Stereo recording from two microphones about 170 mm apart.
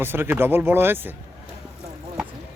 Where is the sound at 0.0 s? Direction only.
15° right (ahead or behind).